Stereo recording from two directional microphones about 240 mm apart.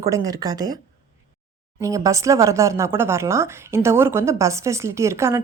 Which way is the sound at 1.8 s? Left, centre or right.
Centre.